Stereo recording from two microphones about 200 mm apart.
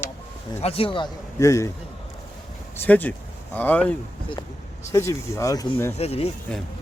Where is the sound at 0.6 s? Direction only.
30° left (ahead or behind).